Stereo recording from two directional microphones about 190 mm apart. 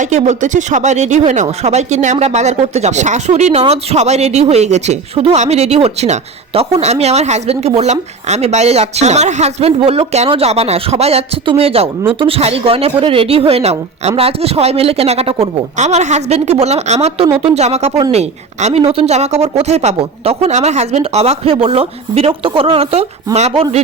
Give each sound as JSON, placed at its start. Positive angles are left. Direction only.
{"t": 0.0, "sound": "speech", "side_deg": -40}